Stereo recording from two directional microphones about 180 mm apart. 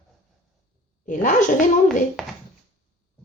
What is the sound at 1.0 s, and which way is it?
Speech, 45° left (ahead or behind).